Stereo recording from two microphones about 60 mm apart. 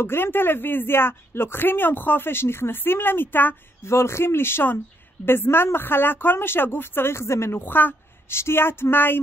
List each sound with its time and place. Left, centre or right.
0.0 s speech: left
3.9 s speech: left